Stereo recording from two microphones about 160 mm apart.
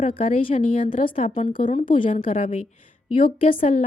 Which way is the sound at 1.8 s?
30° left (ahead or behind).